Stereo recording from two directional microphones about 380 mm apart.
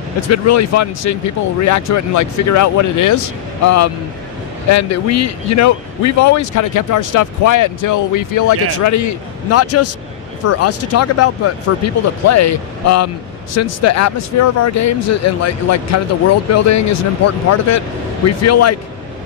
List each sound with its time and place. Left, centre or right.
0.3 s speech: left